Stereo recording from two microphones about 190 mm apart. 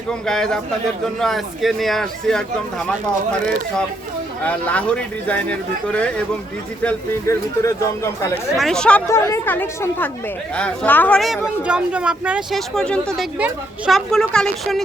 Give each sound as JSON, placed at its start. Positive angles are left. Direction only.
{"t": 0.1, "sound": "speech", "side_deg": 5}
{"t": 4.4, "sound": "speech", "side_deg": 5}
{"t": 8.5, "sound": "speech", "side_deg": 0}